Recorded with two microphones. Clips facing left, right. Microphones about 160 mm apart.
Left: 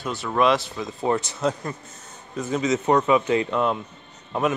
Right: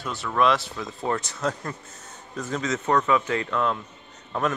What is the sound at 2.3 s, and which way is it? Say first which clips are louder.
Speech: left 5 dB; 5° left (ahead or behind).